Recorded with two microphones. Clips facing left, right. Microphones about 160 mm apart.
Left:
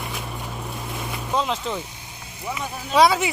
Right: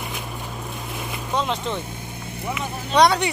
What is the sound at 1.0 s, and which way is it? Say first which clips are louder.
Vehicle: left 1 dB; centre (ahead or behind).